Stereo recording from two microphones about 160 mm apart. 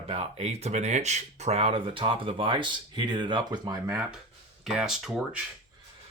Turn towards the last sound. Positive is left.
turn(degrees=0)  # may be behind; listen again after turning